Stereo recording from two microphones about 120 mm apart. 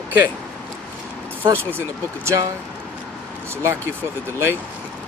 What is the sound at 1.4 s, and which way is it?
Speech, 20° right (ahead or behind).